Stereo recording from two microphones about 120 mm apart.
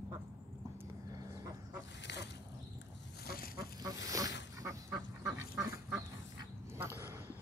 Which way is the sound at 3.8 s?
30° right (ahead or behind).